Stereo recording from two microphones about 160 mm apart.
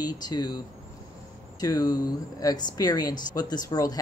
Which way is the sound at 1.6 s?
25° left (ahead or behind).